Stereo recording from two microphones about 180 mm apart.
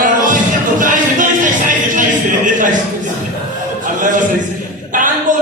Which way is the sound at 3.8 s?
45° right (ahead or behind).